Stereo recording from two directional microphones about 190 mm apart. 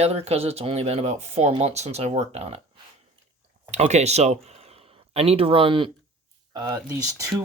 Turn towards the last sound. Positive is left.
turn(degrees=-15)  # may be behind; listen again after turning